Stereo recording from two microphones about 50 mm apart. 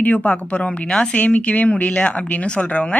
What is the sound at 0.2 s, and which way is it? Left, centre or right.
A man's voice, centre.